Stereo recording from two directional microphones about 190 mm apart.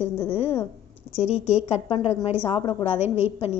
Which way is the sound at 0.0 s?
30° left (ahead or behind).